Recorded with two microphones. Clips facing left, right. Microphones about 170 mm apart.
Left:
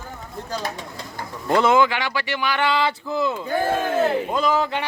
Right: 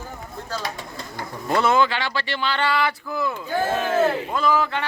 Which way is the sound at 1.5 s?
15° left (ahead or behind).